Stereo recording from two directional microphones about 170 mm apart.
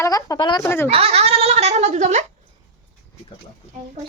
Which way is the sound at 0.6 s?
15° left (ahead or behind).